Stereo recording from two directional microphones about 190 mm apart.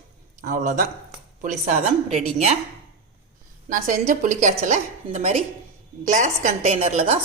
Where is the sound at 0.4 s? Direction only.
45° right (ahead or behind).